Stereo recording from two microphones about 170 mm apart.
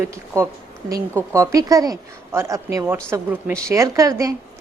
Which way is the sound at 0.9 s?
20° right (ahead or behind).